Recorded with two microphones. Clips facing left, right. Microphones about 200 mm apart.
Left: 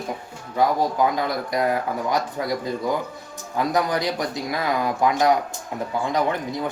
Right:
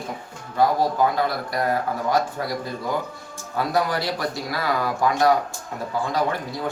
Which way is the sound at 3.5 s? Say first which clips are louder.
Left 1 dB; 15° left (ahead or behind).